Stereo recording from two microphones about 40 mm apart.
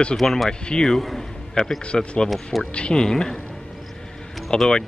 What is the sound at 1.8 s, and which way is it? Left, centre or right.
Speech, left.